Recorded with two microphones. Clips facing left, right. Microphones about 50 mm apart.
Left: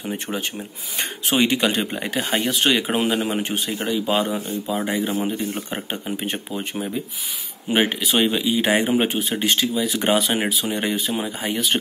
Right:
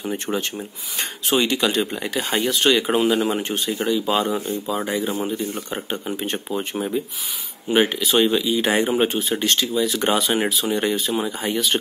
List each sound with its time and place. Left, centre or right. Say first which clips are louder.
0.0 s speech: right 2 dB; centre
1.3 s speech: even; centre
2.3 s speech: right 2 dB; centre
4.8 s speech: even; centre
6.0 s speech: even; centre
7.7 s speech: right 2 dB; centre